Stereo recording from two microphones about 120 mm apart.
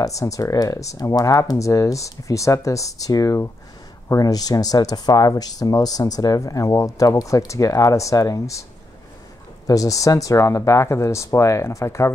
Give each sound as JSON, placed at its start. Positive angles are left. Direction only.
{"t": 0.0, "sound": "speech", "side_deg": 30}
{"t": 9.7, "sound": "speech", "side_deg": 30}